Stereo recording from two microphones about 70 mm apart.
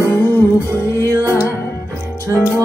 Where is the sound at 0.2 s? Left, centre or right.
Left.